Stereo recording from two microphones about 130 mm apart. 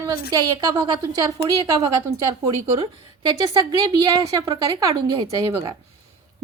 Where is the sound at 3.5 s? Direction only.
25° right (ahead or behind).